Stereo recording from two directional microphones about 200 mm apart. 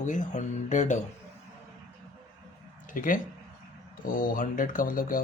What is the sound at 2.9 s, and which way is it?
Speech, 40° left (ahead or behind).